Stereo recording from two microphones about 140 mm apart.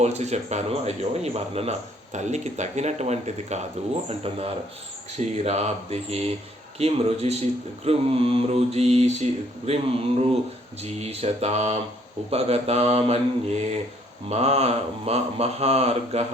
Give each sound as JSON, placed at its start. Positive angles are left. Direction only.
{"t": 0.0, "sound": "mantra", "side_deg": -50}
{"t": 2.1, "sound": "speech", "side_deg": -55}
{"t": 4.1, "sound": "mantra", "side_deg": -45}